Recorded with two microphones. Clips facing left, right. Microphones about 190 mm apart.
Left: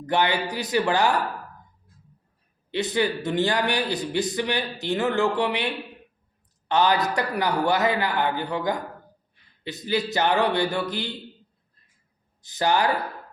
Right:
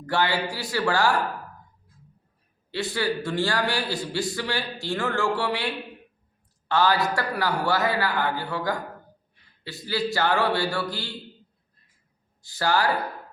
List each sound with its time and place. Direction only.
0.0 s a man's voice: 20° left (ahead or behind)
2.7 s a man's voice: 20° left (ahead or behind)
12.4 s a man's voice: 20° left (ahead or behind)